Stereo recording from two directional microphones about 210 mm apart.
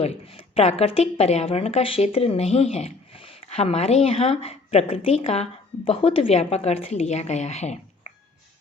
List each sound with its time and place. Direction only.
0.0 s a woman's voice: 30° left (ahead or behind)